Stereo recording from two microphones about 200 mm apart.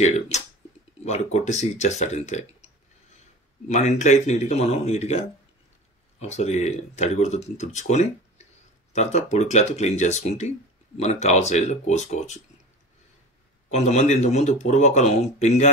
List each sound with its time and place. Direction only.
0.0 s speech: 35° left (ahead or behind)
3.6 s speech: 35° left (ahead or behind)
13.7 s speech: 35° left (ahead or behind)